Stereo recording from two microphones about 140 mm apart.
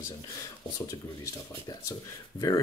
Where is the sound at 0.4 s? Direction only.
25° left (ahead or behind).